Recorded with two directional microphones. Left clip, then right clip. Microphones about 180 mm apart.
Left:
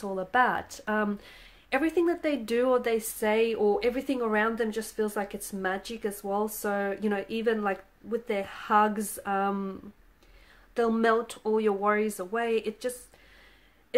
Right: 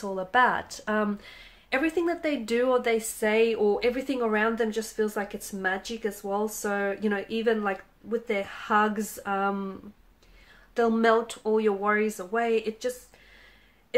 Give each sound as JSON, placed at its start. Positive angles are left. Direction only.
{"t": 0.0, "sound": "speech", "side_deg": 25}